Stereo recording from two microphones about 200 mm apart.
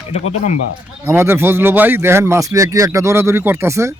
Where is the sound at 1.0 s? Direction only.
10° right (ahead or behind).